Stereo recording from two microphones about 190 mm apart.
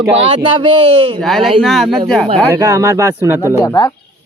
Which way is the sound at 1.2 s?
Centre (ahead or behind).